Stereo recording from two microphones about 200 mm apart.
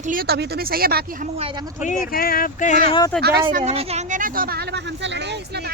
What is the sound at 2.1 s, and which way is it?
Speech, 45° left (ahead or behind).